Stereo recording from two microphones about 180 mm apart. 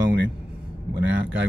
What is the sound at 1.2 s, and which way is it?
Speech, 70° right (ahead or behind).